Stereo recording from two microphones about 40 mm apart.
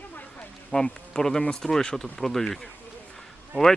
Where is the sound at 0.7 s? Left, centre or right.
Left.